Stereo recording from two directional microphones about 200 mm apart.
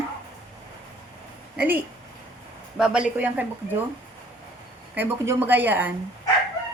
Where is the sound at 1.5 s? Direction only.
10° right (ahead or behind).